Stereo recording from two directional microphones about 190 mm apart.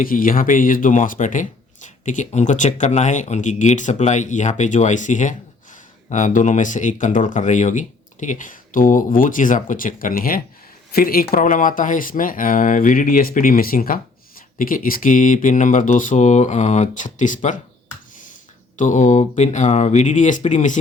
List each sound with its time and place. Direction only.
0.0 s speech: 50° left (ahead or behind)
18.8 s speech: 40° left (ahead or behind)